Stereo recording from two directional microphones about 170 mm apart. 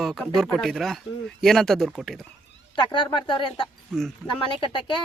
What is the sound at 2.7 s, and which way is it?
Speech, 30° left (ahead or behind).